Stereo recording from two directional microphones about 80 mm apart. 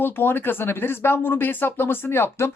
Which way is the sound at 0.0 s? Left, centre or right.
Left.